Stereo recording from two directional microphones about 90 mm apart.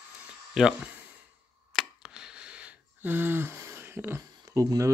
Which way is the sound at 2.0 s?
10° right (ahead or behind).